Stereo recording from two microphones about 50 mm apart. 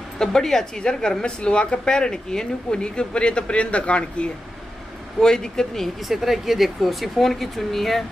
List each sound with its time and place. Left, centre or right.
0.2 s a woman's voice: centre
5.2 s a woman's voice: centre
6.0 s speech: centre